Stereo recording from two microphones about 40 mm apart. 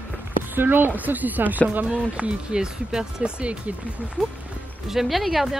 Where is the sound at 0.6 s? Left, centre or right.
Right.